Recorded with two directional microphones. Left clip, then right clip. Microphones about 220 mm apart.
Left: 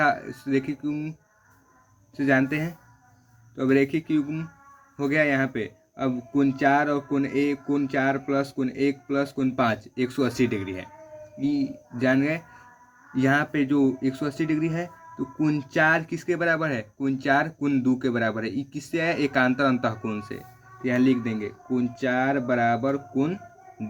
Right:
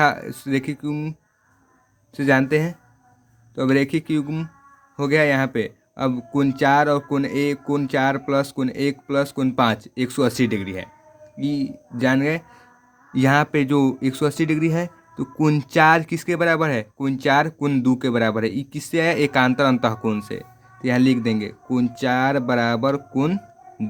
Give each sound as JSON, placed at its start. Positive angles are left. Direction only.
{"t": 0.0, "sound": "speech", "side_deg": -50}
{"t": 2.1, "sound": "speech", "side_deg": -50}